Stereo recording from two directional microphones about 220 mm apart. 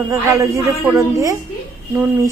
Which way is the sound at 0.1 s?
15° right (ahead or behind).